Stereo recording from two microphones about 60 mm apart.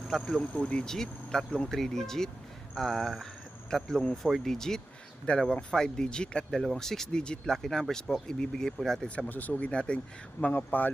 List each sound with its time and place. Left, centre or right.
0.1 s speech: centre
5.3 s speech: left
9.0 s speech: left
10.7 s speech: left